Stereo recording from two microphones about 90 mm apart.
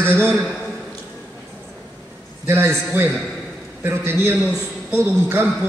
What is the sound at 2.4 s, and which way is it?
A man's voice, 25° right (ahead or behind).